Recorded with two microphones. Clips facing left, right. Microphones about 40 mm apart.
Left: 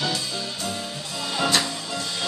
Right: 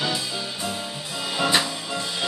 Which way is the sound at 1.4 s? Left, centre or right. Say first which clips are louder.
Right 1 dB; centre.